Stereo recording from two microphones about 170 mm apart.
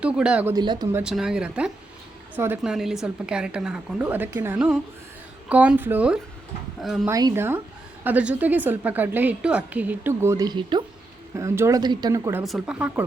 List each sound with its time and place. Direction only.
0.0 s a woman's voice: 5° right (ahead or behind)
0.5 s speech: 25° right (ahead or behind)
0.9 s a woman's voice: 5° right (ahead or behind)
7.1 s a woman's voice: 20° right (ahead or behind)
12.5 s speech: 5° right (ahead or behind)